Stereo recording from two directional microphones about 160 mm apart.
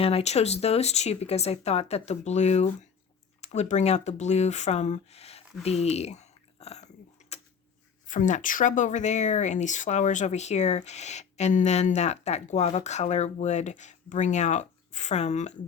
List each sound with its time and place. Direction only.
0.0 s speech: 40° left (ahead or behind)
7.2 s a sound: 45° left (ahead or behind)
8.0 s speech: 55° left (ahead or behind)